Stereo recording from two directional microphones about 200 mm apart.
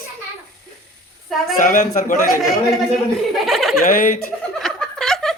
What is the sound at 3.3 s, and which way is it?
Speech, centre (ahead or behind).